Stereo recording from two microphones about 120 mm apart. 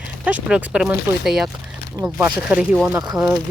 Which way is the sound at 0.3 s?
10° right (ahead or behind).